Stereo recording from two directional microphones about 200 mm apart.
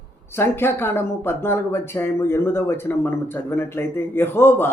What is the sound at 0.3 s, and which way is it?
Speech, 10° left (ahead or behind).